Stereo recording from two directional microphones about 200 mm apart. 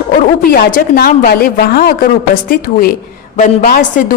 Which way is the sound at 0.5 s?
45° left (ahead or behind).